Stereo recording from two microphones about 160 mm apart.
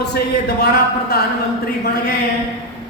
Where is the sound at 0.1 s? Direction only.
85° left.